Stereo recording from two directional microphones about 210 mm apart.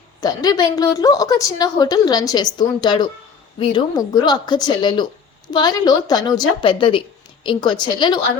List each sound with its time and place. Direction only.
0.2 s a woman's voice: 20° left (ahead or behind)